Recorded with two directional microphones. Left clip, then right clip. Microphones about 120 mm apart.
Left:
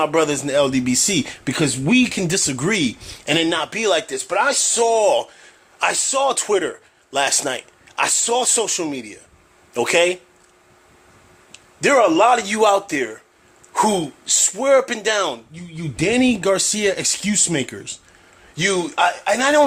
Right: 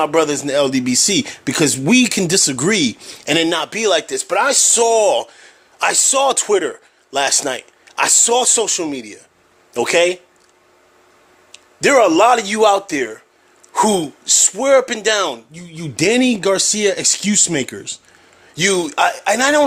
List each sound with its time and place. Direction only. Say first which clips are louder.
0.0 s speech: right 2 dB; 30° right (ahead or behind)
1.5 s speech: right 4 dB; 55° right (ahead or behind); by 3.3 s 30° right (ahead or behind)
3.3 s speech: right 3 dB; 45° right (ahead or behind); by 4.8 s 65° right (ahead or behind)
4.8 s a man's voice: right 1 dB; 45° right (ahead or behind)
8.0 s speech: right 5 dB; 60° right (ahead or behind)
8.4 s speech: right 3 dB; 30° right (ahead or behind)
11.9 s speech: right 3 dB; 55° right (ahead or behind)
12.5 s speech: right 3 dB; 30° right (ahead or behind)
13.7 s speech: right 3 dB; 45° right (ahead or behind)
15.5 s speech: right 4 dB; 60° right (ahead or behind)
16.2 s speech: right 2 dB; 30° right (ahead or behind)
18.5 s speech: right 3 dB; 55° right (ahead or behind)